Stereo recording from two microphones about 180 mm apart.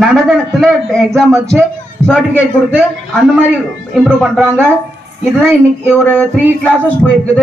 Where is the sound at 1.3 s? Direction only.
15° right (ahead or behind).